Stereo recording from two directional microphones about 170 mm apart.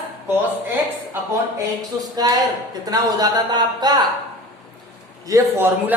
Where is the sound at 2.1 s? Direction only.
25° right (ahead or behind).